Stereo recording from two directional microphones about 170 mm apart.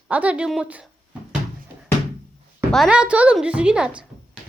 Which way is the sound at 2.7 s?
5° right (ahead or behind).